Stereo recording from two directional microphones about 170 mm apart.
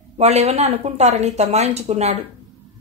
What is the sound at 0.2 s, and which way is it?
Speech, 40° right (ahead or behind).